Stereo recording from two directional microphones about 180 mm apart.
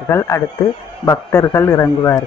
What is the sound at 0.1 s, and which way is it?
A man's voice, 15° left (ahead or behind).